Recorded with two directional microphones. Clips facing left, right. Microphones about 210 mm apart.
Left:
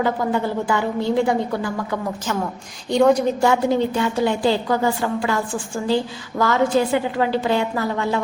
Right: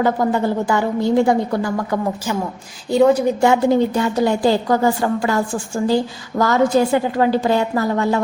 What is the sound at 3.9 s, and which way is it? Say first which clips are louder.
A woman's voice: right 3 dB; 40° right (ahead or behind).